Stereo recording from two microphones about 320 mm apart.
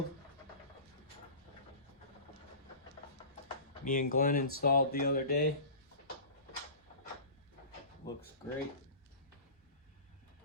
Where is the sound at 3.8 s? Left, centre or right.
Left.